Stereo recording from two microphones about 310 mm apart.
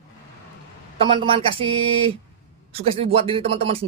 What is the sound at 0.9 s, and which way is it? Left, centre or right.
A man's voice, centre.